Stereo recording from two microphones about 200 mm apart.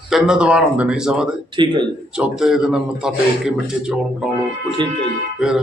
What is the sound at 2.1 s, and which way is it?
A man's voice, 5° right (ahead or behind).